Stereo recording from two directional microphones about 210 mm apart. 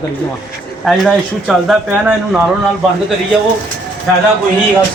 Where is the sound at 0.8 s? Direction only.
Centre (ahead or behind).